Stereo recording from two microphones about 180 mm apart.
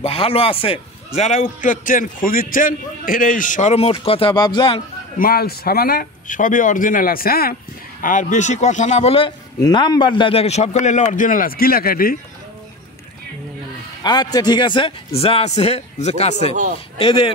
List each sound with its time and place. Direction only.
0.0 s a man's voice: 30° left (ahead or behind)
5.1 s a man's voice: 55° left (ahead or behind)
8.0 s a man's voice: 45° left (ahead or behind)
9.6 s a man's voice: 20° left (ahead or behind); by 12.2 s 55° left (ahead or behind)
14.0 s a man's voice: 25° left (ahead or behind)